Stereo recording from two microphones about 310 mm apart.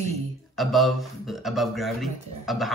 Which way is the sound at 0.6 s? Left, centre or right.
Centre.